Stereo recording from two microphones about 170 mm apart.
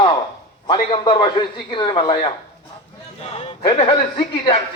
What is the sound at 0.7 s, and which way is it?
A man's voice, 30° left (ahead or behind).